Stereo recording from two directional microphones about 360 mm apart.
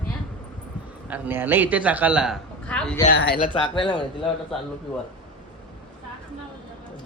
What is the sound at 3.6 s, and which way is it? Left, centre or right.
Speech, centre.